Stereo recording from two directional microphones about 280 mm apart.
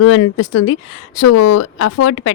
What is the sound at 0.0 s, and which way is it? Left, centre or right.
Speech, left.